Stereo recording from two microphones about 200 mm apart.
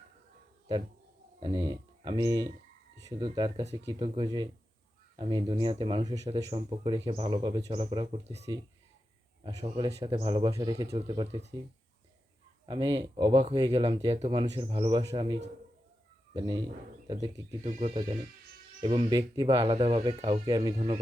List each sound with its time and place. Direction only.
1.4 s speech: 25° right (ahead or behind)
9.6 s speech: 25° right (ahead or behind)
12.6 s speech: 20° right (ahead or behind)
17.6 s speech: 30° right (ahead or behind)